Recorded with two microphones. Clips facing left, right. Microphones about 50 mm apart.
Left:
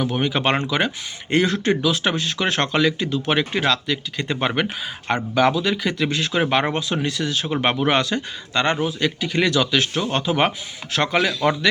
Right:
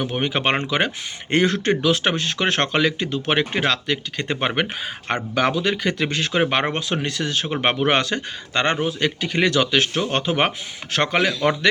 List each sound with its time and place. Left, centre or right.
0.0 s speech: right
5.3 s speech: right